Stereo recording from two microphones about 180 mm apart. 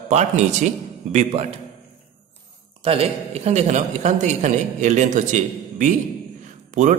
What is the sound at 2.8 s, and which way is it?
A man's voice, 35° right (ahead or behind).